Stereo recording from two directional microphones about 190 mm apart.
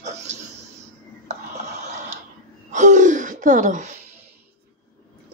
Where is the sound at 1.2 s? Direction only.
35° right (ahead or behind).